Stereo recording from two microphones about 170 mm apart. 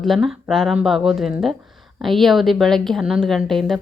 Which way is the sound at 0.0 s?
Centre (ahead or behind).